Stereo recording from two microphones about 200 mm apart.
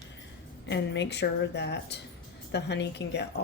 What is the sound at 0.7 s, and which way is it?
A woman's voice, 60° left (ahead or behind).